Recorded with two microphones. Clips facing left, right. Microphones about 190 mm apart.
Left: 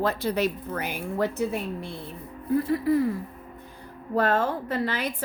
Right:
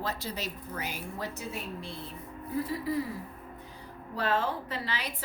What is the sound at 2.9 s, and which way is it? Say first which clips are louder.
Speech: left 9 dB; 55° left (ahead or behind).